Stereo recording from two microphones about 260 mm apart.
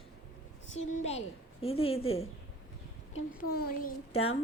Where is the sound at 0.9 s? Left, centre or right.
Left.